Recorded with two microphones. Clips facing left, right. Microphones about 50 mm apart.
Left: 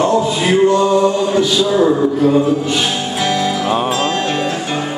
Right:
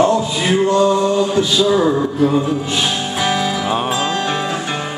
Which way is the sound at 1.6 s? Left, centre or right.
Centre.